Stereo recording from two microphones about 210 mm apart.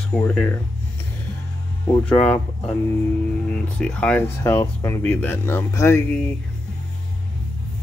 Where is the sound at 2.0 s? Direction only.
5° left (ahead or behind).